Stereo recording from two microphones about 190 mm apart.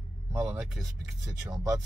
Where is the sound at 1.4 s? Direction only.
20° right (ahead or behind).